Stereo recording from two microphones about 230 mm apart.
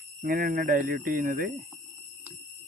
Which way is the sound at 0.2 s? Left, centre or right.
Right.